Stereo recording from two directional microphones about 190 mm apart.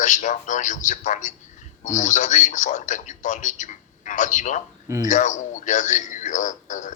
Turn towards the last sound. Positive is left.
turn(degrees=40)  # may be behind; listen again after turning